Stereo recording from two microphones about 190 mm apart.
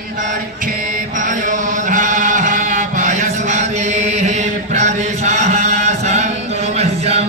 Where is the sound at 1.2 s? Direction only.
40° right (ahead or behind).